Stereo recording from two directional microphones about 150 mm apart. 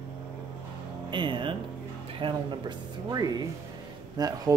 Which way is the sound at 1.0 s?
30° right (ahead or behind).